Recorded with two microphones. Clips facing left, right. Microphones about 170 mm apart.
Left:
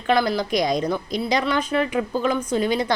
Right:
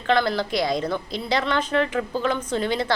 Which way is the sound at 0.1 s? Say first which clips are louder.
Left 1 dB; 15° left (ahead or behind).